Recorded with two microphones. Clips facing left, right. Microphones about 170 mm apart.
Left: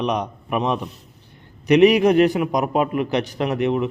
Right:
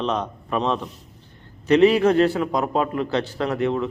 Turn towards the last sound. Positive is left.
turn(degrees=20)  # may be behind; listen again after turning